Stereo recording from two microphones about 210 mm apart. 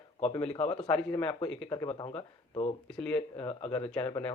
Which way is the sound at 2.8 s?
5° left (ahead or behind).